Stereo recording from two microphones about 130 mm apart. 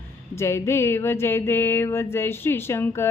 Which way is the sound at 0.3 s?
20° left (ahead or behind).